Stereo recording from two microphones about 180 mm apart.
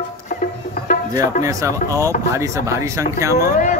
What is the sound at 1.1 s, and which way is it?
Speech, 20° right (ahead or behind).